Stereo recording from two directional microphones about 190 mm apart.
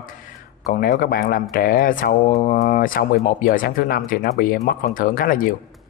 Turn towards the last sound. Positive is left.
turn(degrees=45)  # may be behind; listen again after turning